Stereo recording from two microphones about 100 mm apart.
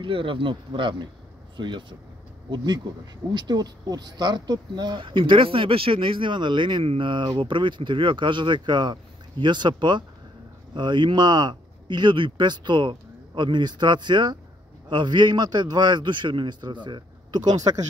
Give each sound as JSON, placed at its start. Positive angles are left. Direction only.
{"t": 0.0, "sound": "speech", "side_deg": -60}